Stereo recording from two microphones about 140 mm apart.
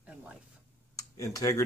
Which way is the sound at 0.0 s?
10° right (ahead or behind).